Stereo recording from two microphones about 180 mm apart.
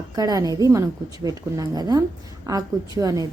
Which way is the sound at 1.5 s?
20° right (ahead or behind).